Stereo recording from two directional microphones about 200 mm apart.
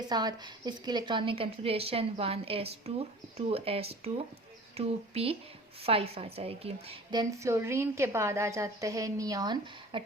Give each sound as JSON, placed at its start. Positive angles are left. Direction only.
{"t": 0.1, "sound": "a woman's voice", "side_deg": -20}